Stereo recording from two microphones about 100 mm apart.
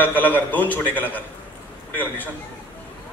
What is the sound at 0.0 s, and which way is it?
A man's voice, 20° left (ahead or behind).